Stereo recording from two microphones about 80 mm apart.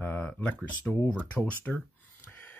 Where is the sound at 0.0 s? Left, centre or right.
Left.